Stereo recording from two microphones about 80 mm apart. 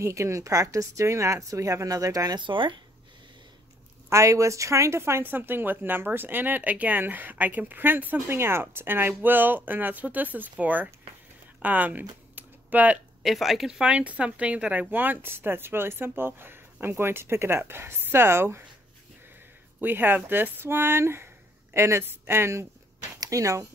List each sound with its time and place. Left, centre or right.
0.0 s speech: right
2.3 s speech: right
4.1 s speech: right; by 10.9 s centre
11.6 s a sound: right
13.2 s speech: centre; by 18.7 s right
19.8 s speech: right
23.2 s speech: right